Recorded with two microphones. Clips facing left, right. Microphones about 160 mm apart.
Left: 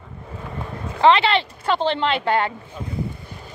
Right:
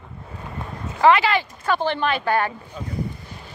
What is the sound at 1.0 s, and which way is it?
Speech, 25° left (ahead or behind).